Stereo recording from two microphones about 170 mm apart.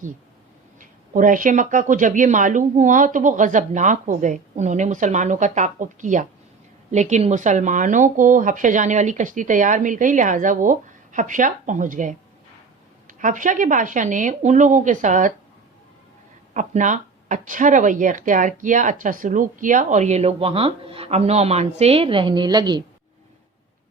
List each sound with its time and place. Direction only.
0.8 s speech: 50° right (ahead or behind)
16.6 s speech: 45° right (ahead or behind); by 22.8 s 25° right (ahead or behind)